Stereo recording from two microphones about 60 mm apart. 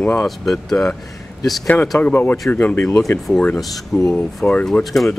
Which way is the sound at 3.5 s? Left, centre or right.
Centre.